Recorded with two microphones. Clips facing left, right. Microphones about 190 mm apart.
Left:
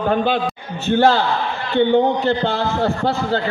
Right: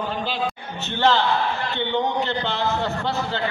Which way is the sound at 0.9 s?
45° left (ahead or behind).